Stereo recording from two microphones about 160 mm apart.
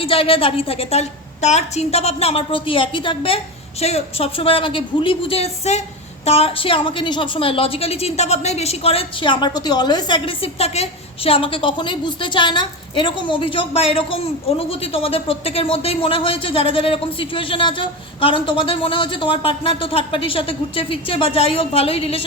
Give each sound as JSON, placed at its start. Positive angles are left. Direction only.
{"t": 0.0, "sound": "a woman's voice", "side_deg": 35}